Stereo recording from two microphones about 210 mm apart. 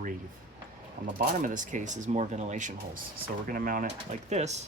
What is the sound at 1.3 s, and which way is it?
Speech, 40° right (ahead or behind).